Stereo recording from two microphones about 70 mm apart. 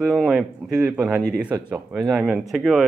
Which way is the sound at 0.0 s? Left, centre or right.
Centre.